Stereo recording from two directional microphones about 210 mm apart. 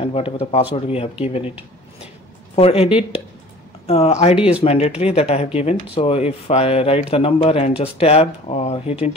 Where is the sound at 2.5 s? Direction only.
30° left (ahead or behind).